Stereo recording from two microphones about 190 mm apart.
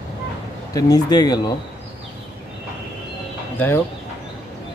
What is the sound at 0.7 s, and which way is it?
Speech, 20° left (ahead or behind).